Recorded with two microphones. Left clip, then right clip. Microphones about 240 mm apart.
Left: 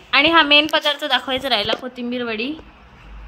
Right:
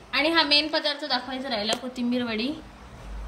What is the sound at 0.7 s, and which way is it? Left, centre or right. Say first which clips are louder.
Speech: left 8 dB; left.